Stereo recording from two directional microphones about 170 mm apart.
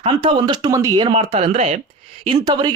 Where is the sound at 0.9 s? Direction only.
30° right (ahead or behind).